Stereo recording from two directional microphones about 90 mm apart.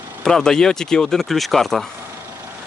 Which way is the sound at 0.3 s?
5° left (ahead or behind).